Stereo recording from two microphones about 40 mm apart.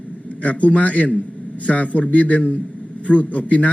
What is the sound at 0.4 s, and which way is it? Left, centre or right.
A man's voice, left.